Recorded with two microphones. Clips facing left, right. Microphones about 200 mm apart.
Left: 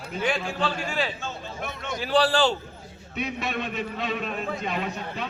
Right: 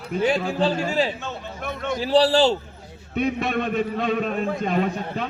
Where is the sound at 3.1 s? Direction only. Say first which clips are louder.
Right 7 dB; 55° right (ahead or behind).